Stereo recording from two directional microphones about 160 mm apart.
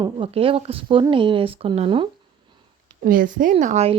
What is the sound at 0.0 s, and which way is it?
Speech, 35° right (ahead or behind).